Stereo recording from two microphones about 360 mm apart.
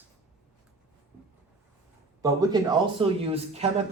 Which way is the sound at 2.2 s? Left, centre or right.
Centre.